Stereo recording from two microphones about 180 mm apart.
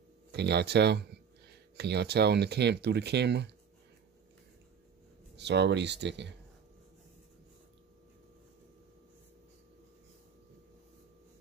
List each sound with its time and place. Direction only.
0.3 s speech: 65° right (ahead or behind)
5.3 s speech: 70° right (ahead or behind)